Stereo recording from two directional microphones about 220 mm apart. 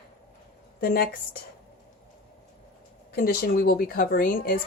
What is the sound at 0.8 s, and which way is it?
Speech, 45° left (ahead or behind).